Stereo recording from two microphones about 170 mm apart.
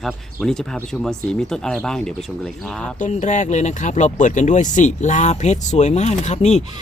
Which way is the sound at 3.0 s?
45° left (ahead or behind).